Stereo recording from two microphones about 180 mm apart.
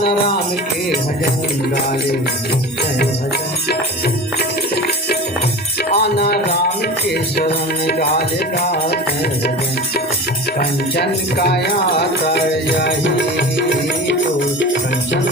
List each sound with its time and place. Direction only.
6.0 s music: 60° left (ahead or behind)
10.6 s music: 60° left (ahead or behind); by 14.2 s 80° left